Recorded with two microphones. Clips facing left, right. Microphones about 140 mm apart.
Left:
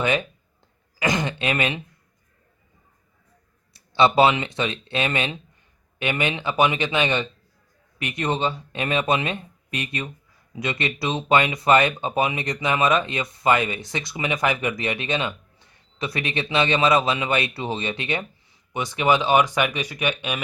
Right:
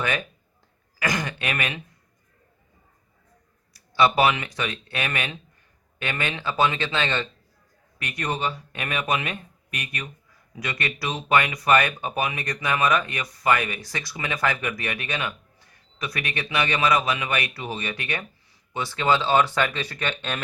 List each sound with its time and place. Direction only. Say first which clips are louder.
0.0 s speech: left 4 dB; 20° left (ahead or behind)
3.7 s speech: left 2 dB; 25° left (ahead or behind)